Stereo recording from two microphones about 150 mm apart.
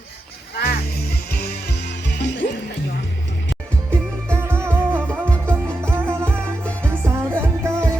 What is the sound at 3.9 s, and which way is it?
Music, 15° right (ahead or behind).